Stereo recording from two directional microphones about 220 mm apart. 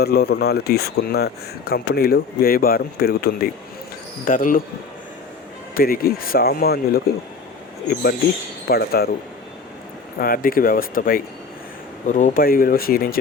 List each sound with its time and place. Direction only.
0.0 s speech: 50° left (ahead or behind)
5.7 s speech: 45° left (ahead or behind)
8.6 s speech: 45° left (ahead or behind)
10.2 s speech: 40° left (ahead or behind)